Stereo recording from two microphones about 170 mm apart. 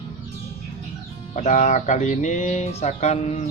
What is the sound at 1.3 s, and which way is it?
Speech, 45° left (ahead or behind).